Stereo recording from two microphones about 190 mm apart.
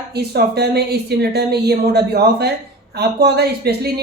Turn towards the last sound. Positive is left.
turn(degrees=-55)  # may be behind; listen again after turning